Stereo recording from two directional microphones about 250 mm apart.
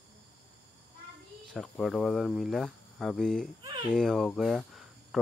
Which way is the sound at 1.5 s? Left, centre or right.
Centre.